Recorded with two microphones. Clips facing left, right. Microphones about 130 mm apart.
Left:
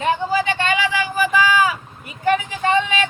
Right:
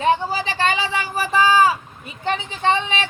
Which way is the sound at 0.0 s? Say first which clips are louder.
Even; 35° right (ahead or behind).